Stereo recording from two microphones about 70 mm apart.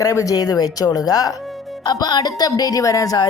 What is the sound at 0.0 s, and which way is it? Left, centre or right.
Speech, left.